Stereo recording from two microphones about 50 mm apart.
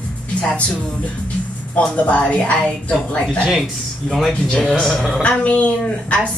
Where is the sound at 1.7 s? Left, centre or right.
Left.